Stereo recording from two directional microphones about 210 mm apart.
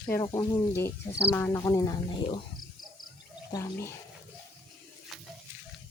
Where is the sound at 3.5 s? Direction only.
15° left (ahead or behind).